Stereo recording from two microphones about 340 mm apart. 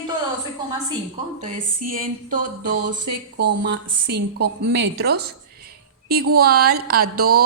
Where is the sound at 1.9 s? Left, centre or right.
Right.